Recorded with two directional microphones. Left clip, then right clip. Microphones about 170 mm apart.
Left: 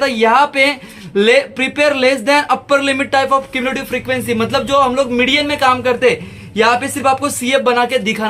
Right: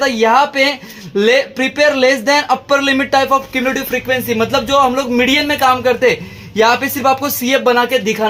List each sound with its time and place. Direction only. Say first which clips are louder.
0.0 s speech: even; 35° right (ahead or behind)